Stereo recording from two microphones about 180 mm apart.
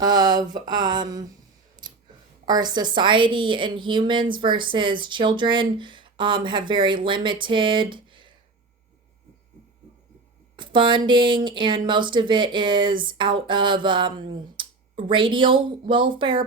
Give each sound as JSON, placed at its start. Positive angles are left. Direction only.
{"t": 0.0, "sound": "a woman's voice", "side_deg": -20}
{"t": 1.8, "sound": "a sound", "side_deg": -25}
{"t": 2.5, "sound": "a woman's voice", "side_deg": -25}
{"t": 10.6, "sound": "a woman's voice", "side_deg": -25}